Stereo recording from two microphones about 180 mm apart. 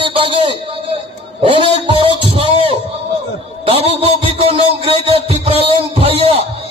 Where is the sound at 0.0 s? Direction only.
30° right (ahead or behind).